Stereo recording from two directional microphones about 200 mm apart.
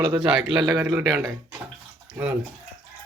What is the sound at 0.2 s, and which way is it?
A man's voice, 5° right (ahead or behind).